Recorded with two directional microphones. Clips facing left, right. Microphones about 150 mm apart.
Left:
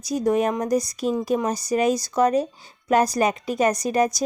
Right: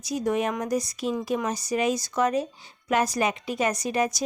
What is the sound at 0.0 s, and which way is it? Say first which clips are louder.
Speech: left 5 dB; 40° left (ahead or behind).